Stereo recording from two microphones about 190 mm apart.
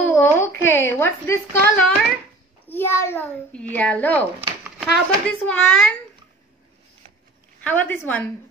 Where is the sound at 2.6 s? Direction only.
10° left (ahead or behind).